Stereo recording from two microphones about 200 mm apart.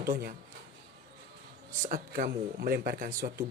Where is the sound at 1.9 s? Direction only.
50° right (ahead or behind).